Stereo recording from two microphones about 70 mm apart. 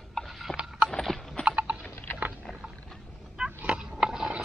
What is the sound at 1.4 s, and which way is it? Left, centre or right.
Typing, right.